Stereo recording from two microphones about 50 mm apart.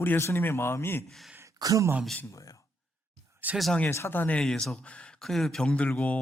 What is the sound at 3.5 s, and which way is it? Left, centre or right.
Speech, right.